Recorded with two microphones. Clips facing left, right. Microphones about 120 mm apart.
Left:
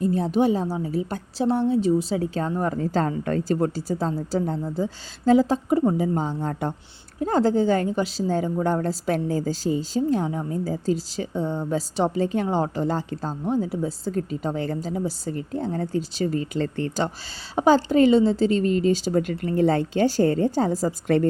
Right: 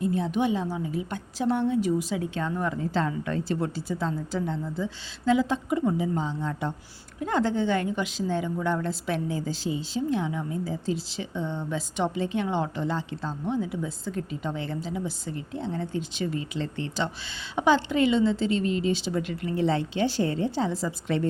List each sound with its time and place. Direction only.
0.0 s a woman's voice: 40° left (ahead or behind)